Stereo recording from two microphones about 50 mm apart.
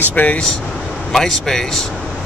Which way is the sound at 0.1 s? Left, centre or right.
Left.